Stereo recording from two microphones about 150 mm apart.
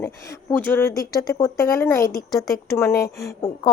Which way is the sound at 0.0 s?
20° left (ahead or behind).